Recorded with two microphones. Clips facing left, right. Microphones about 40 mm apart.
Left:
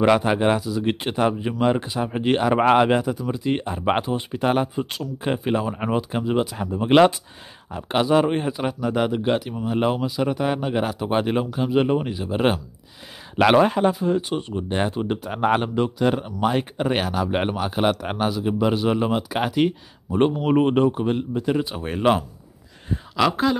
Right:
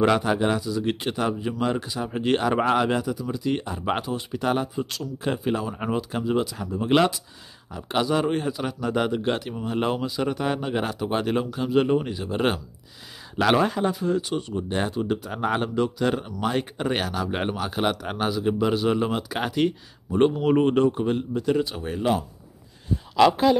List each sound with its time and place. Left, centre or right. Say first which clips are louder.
0.2 s speech: left 3 dB; left
0.6 s speech: left 2 dB; centre
2.6 s speech: left 5 dB; left
6.4 s speech: left 3 dB; left
8.8 s speech: left 2 dB; centre
11.1 s speech: left 2 dB; centre
13.5 s speech: left 4 dB; left
16.0 s speech: left 4 dB; centre
21.8 s speech: left 8 dB; left
23.1 s speech: right 2 dB; centre